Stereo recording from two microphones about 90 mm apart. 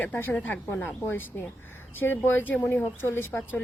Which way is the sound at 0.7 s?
30° left (ahead or behind).